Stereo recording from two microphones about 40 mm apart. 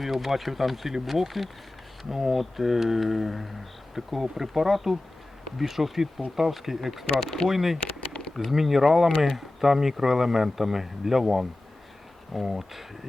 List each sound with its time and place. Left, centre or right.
0.0 s speech: centre
8.1 s a sound: centre
8.4 s speech: centre